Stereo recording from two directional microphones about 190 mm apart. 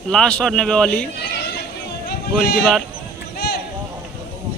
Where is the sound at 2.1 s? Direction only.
55° left (ahead or behind).